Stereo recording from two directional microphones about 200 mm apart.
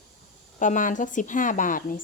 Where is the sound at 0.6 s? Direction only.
40° left (ahead or behind).